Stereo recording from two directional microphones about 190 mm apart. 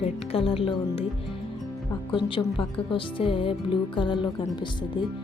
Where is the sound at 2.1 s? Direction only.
25° left (ahead or behind).